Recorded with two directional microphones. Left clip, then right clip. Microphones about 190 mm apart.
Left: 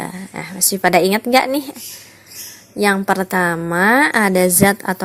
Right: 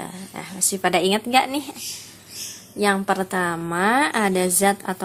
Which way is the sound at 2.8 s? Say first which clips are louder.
Left 5 dB; 30° left (ahead or behind).